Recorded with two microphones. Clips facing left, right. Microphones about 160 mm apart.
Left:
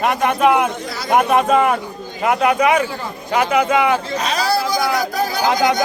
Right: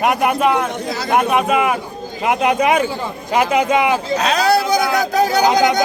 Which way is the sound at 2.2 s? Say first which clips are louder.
Even; 20° right (ahead or behind).